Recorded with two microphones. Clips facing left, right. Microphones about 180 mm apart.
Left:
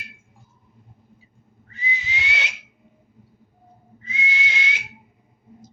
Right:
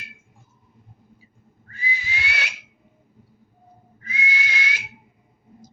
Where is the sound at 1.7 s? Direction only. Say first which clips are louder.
Even; 20° left (ahead or behind).